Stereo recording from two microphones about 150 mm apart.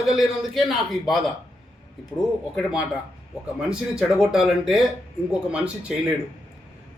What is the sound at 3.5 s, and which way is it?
A man's voice, 5° right (ahead or behind).